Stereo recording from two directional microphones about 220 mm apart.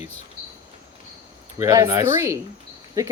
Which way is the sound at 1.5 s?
15° right (ahead or behind).